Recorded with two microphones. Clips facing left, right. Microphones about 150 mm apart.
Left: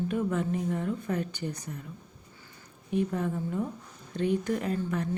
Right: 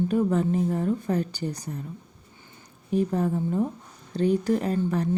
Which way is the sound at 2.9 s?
35° right (ahead or behind).